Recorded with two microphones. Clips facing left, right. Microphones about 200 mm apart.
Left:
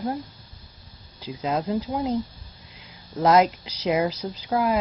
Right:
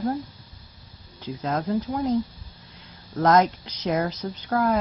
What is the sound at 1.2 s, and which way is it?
Speech, 10° left (ahead or behind).